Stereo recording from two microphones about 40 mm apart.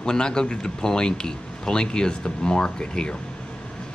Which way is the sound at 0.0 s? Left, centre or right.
Left.